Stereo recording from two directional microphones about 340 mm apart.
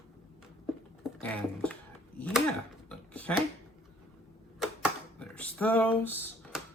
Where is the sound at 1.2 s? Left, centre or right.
Centre.